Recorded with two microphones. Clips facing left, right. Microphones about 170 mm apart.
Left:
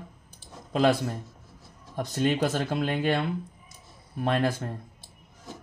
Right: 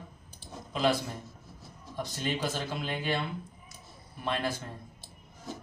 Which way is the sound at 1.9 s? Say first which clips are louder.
Left 8 dB; 55° left (ahead or behind).